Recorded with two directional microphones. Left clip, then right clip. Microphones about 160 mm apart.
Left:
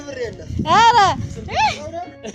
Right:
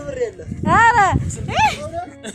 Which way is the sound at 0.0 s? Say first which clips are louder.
Right 4 dB; 45° left (ahead or behind).